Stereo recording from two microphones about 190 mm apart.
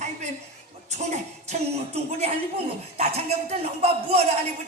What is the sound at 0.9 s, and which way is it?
Music, 35° right (ahead or behind).